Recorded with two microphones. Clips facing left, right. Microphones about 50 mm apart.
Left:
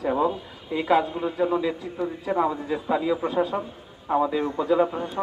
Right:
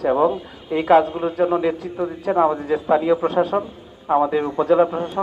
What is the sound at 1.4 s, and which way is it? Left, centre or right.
A man's voice, right.